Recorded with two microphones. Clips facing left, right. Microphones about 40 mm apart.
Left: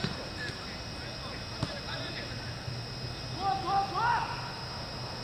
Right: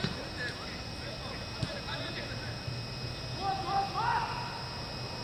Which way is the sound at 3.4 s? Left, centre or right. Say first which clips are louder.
Left 2 dB; centre.